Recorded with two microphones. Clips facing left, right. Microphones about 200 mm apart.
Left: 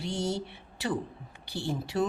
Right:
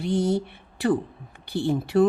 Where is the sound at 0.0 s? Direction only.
55° right (ahead or behind).